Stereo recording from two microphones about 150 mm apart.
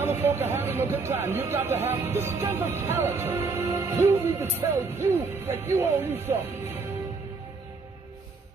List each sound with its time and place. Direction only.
0.0 s speech: 15° right (ahead or behind)